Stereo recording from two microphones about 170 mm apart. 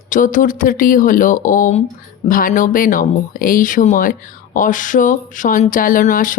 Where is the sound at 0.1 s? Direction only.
50° left (ahead or behind).